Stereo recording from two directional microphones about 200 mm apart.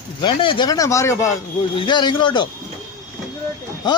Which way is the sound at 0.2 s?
25° left (ahead or behind).